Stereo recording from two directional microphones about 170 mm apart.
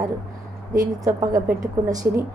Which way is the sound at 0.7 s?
20° right (ahead or behind).